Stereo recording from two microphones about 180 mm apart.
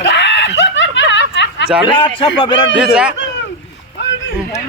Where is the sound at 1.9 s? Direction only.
30° left (ahead or behind).